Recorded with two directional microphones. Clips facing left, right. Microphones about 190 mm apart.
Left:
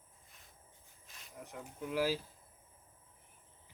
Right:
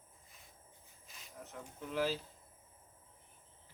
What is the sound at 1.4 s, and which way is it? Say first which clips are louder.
Speech: left 3 dB; 10° left (ahead or behind).